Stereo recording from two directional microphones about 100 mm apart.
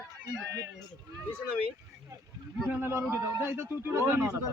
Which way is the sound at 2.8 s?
20° right (ahead or behind).